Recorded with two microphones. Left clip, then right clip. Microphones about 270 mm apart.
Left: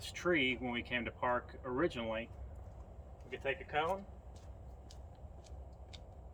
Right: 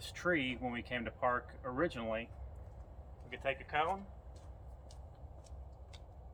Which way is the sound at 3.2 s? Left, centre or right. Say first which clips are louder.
Right 1 dB; centre.